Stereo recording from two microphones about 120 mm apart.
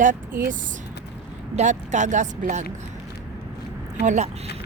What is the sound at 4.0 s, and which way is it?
Speech, 90° right.